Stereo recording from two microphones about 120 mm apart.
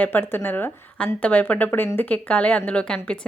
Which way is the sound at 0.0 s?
15° left (ahead or behind).